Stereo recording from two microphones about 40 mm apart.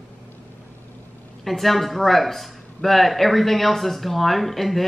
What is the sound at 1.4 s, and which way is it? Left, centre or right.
Speech, centre.